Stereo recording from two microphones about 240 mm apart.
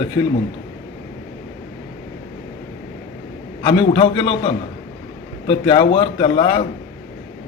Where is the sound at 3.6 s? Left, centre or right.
Left.